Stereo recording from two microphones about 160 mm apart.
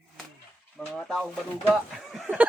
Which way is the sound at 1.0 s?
5° left (ahead or behind).